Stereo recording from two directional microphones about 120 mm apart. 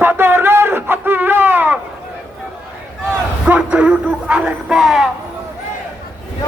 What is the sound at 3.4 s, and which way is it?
Speech, 10° right (ahead or behind).